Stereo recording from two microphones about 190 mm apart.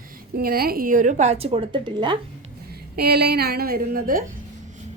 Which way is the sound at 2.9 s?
60° right (ahead or behind).